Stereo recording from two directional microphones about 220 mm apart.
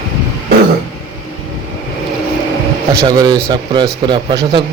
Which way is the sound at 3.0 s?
20° right (ahead or behind).